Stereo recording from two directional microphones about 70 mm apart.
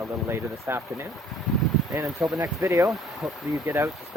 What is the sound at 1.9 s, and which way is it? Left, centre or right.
Speech, right.